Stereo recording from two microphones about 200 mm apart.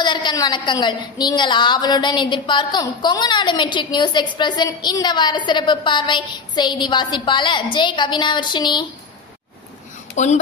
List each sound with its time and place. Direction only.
0.0 s a woman's voice: 20° left (ahead or behind)
10.1 s speech: 35° left (ahead or behind)